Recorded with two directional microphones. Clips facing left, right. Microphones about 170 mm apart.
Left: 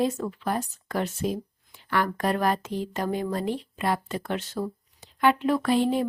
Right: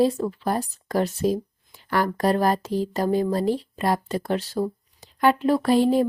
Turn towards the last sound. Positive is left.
turn(degrees=-40)  # may be behind; listen again after turning